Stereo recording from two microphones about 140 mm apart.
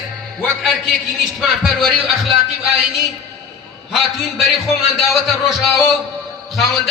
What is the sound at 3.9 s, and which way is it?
Speech, centre (ahead or behind).